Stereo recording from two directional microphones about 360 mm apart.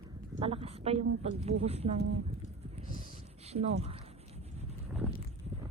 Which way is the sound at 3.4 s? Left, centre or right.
Centre.